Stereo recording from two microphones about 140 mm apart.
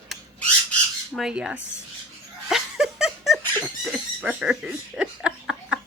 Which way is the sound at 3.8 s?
Centre (ahead or behind).